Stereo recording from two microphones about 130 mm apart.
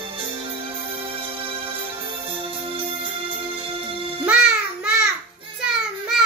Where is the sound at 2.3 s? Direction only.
40° right (ahead or behind).